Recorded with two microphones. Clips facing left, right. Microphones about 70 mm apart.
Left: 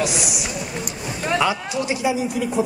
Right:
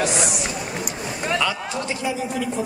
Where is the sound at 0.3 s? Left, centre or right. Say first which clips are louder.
Right 1 dB; centre.